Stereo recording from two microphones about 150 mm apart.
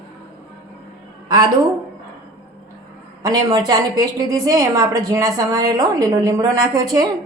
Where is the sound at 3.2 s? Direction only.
25° right (ahead or behind).